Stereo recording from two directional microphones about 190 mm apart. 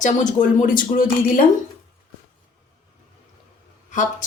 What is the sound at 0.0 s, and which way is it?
Speech, 40° left (ahead or behind).